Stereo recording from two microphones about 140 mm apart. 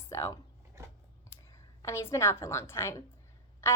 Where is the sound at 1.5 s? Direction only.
20° left (ahead or behind).